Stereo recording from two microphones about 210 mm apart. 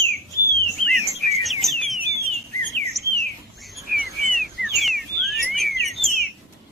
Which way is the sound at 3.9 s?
45° right (ahead or behind).